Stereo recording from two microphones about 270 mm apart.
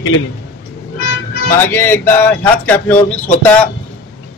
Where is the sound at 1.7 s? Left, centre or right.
Centre.